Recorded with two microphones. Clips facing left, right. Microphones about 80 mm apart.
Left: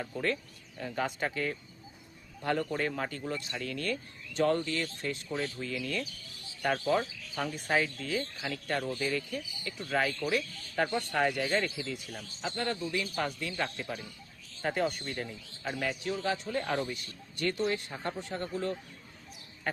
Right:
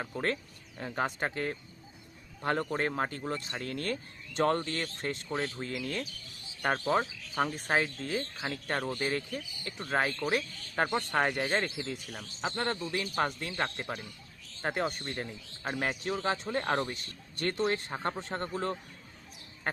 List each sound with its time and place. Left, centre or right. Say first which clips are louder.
0.0 s a man's voice: even; right
8.9 s a man's voice: even; right
12.5 s a man's voice: even; right